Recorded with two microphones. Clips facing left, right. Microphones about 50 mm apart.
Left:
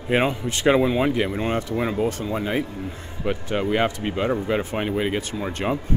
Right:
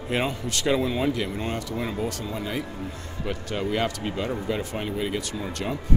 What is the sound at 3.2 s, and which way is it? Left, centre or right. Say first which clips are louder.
A man's voice: left 5 dB; left.